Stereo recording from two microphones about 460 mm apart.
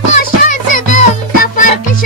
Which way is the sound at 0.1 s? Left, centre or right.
Centre.